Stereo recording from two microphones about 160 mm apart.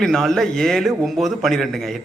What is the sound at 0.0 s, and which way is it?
A man's voice, centre (ahead or behind).